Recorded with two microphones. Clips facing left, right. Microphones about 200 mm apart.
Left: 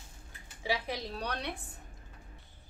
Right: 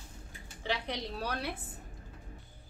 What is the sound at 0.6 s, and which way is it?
Speech, 5° left (ahead or behind).